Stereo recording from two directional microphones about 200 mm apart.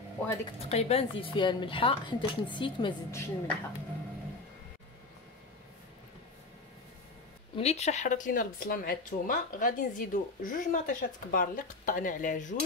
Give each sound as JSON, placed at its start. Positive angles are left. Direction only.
{"t": 0.7, "sound": "a woman's voice", "side_deg": 30}
{"t": 7.5, "sound": "speech", "side_deg": 30}